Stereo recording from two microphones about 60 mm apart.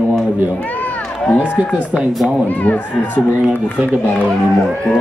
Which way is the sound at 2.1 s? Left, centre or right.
Centre.